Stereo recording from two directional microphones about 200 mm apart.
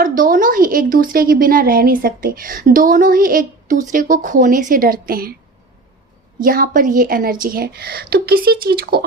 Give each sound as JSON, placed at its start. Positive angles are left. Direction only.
{"t": 0.0, "sound": "a woman's voice", "side_deg": -45}
{"t": 6.4, "sound": "a woman's voice", "side_deg": -45}